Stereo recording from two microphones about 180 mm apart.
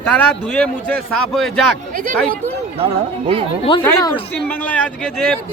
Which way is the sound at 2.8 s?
35° right (ahead or behind).